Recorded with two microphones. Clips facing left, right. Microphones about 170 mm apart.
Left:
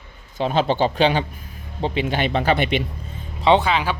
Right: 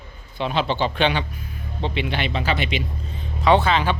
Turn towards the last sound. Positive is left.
turn(degrees=10)  # may be behind; listen again after turning